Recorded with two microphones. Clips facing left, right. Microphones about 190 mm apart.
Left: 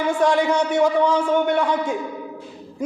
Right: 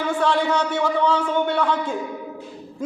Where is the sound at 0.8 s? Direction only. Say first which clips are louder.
Left 3 dB; 15° left (ahead or behind).